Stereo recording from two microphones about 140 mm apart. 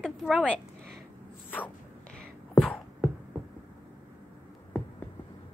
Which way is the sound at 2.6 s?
5° left (ahead or behind).